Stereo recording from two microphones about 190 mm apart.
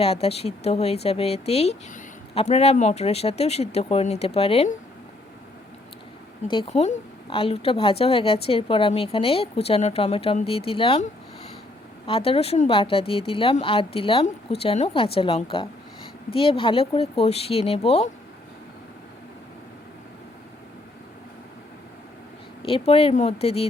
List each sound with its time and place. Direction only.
0.0 s a woman's voice: 30° left (ahead or behind)
6.5 s a woman's voice: 30° left (ahead or behind)
22.9 s a woman's voice: 30° left (ahead or behind)